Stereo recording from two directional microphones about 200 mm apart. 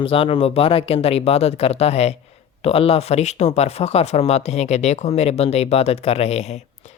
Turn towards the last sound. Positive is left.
turn(degrees=35)  # may be behind; listen again after turning